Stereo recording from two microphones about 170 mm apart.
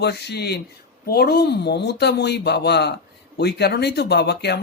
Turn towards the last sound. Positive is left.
turn(degrees=80)